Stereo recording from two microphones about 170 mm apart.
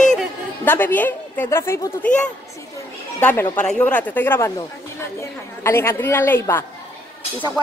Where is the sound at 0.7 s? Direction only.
10° left (ahead or behind).